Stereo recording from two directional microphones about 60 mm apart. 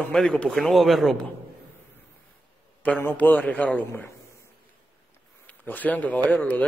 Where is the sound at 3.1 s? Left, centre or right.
Left.